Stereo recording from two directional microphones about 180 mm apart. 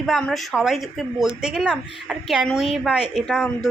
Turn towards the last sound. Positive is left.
turn(degrees=30)  # may be behind; listen again after turning